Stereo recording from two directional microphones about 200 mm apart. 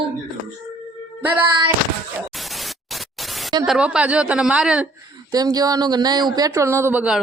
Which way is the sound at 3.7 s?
5° right (ahead or behind).